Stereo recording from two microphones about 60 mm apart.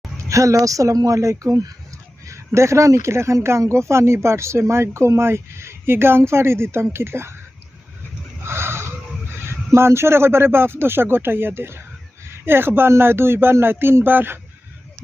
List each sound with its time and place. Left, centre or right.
0.3 s speech: right
2.2 s speech: right
8.4 s a sound: right
9.7 s speech: right